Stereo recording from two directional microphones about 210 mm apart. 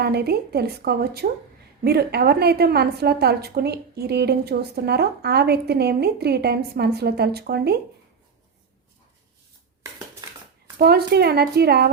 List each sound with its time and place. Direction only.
0.0 s a woman's voice: 50° right (ahead or behind)
10.2 s a sound: 20° right (ahead or behind)
10.8 s a woman's voice: 50° right (ahead or behind)